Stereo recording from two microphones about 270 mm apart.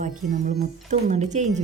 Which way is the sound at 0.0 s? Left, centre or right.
Right.